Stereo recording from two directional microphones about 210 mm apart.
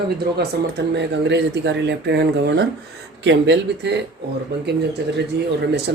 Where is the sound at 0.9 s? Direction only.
55° right (ahead or behind).